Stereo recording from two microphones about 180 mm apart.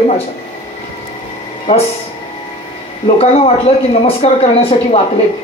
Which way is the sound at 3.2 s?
35° left (ahead or behind).